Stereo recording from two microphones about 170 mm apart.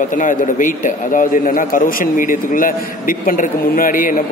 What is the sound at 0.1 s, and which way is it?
A man's voice, 50° left (ahead or behind).